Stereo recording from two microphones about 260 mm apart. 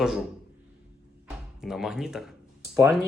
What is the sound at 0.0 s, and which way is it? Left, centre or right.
Speech, centre.